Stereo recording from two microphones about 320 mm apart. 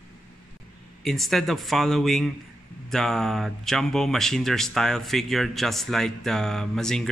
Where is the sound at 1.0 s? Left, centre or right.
Centre.